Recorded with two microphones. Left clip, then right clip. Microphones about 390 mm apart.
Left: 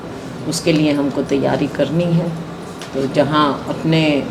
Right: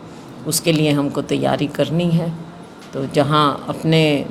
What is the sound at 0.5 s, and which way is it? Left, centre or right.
Speech, right.